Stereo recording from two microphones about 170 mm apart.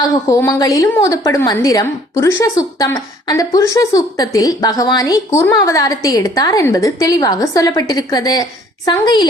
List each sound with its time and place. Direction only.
0.0 s a woman's voice: 20° left (ahead or behind)